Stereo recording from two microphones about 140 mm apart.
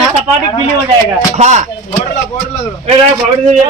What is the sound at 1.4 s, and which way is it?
Chopping, 55° right (ahead or behind).